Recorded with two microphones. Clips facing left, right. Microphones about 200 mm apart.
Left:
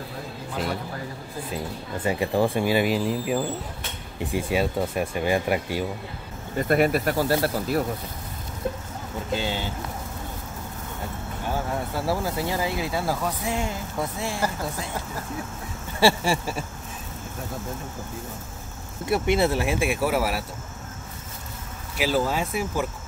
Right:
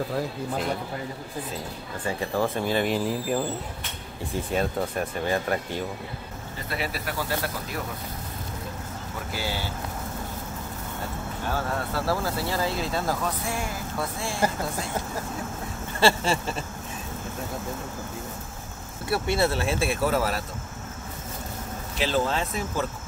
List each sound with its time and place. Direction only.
2.0 s speech: 15° left (ahead or behind)
6.7 s speech: 50° left (ahead or behind)
9.3 s speech: 20° left (ahead or behind)
11.5 s speech: 15° left (ahead or behind)
16.0 s speech: 15° left (ahead or behind)
19.0 s speech: 15° left (ahead or behind)
21.9 s speech: 10° left (ahead or behind)